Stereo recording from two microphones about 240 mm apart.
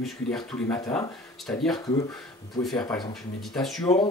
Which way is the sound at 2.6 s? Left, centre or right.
Centre.